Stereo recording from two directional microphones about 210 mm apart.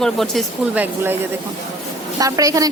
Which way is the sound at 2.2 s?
15° right (ahead or behind).